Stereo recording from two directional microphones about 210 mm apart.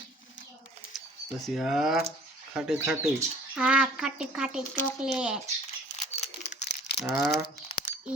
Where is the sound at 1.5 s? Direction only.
Centre (ahead or behind).